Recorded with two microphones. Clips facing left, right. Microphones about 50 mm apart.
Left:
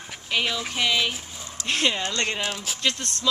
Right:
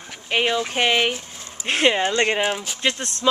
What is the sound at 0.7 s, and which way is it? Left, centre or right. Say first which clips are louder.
Speech: right 4 dB; right.